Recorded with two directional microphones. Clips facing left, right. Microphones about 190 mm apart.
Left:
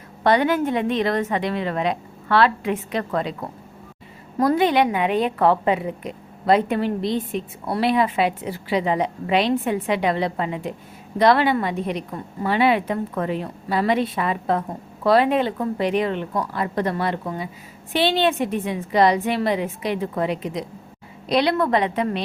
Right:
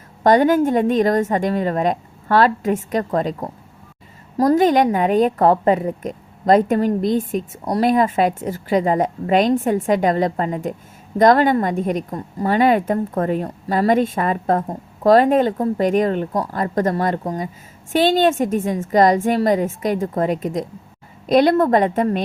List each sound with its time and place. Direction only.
0.2 s a woman's voice: 45° right (ahead or behind)